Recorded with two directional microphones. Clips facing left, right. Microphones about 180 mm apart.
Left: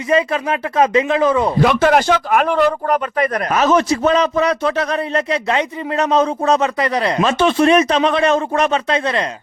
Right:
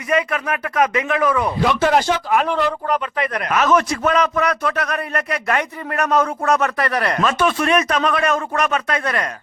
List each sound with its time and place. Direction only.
0.1 s speech: 30° left (ahead or behind)
1.6 s speech: 60° left (ahead or behind); by 9.3 s 25° left (ahead or behind)